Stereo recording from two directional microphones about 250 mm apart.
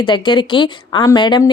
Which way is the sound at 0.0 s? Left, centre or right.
Centre.